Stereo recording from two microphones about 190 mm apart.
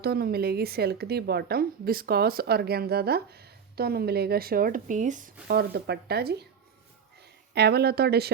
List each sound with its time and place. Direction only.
0.0 s speech: 55° right (ahead or behind)
7.5 s speech: 60° right (ahead or behind)